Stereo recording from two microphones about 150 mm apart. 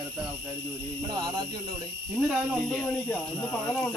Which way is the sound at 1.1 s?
30° right (ahead or behind).